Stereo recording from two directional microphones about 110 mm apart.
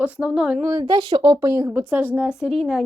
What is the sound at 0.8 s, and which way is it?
A woman's voice, 40° right (ahead or behind).